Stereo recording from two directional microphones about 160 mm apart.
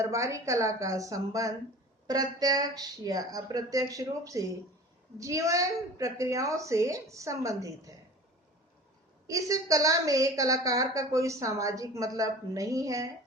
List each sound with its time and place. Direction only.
0.0 s a woman's voice: 20° right (ahead or behind)
9.2 s a woman's voice: 20° right (ahead or behind)